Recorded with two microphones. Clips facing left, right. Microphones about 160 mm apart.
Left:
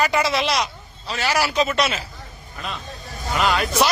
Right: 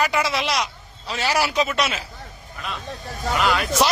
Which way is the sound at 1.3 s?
20° right (ahead or behind).